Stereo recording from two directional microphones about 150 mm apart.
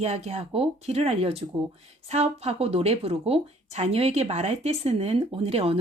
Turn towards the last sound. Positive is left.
turn(degrees=-40)  # may be behind; listen again after turning